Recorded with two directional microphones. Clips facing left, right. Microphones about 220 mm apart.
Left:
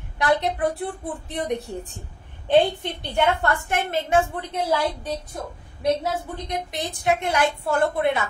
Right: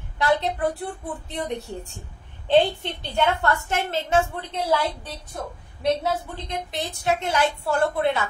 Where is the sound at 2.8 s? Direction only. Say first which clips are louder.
Left 1 dB; 15° left (ahead or behind).